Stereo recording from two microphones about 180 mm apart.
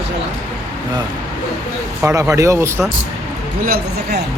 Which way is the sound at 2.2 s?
15° right (ahead or behind).